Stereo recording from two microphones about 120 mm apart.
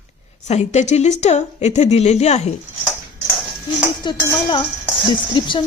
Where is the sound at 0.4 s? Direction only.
70° left (ahead or behind).